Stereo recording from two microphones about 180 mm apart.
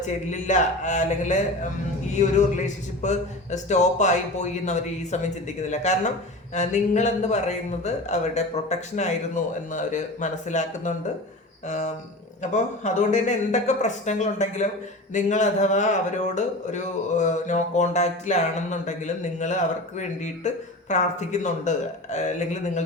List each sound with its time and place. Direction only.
0.3 s speech: 40° left (ahead or behind)